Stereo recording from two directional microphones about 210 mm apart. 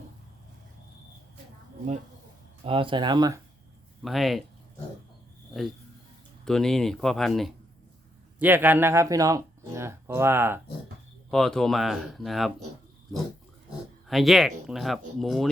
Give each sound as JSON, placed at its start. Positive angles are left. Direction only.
{"t": 2.6, "sound": "speech", "side_deg": -25}
{"t": 4.0, "sound": "speech", "side_deg": 0}
{"t": 6.4, "sound": "speech", "side_deg": 0}
{"t": 11.3, "sound": "speech", "side_deg": 0}
{"t": 14.1, "sound": "speech", "side_deg": 0}